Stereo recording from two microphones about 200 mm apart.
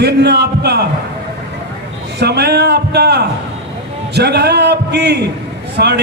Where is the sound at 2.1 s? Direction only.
55° right (ahead or behind).